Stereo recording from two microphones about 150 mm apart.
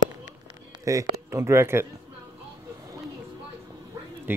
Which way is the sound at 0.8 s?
20° right (ahead or behind).